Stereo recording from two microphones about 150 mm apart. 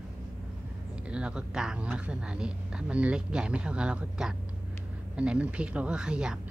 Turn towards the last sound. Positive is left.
turn(degrees=-5)  # may be behind; listen again after turning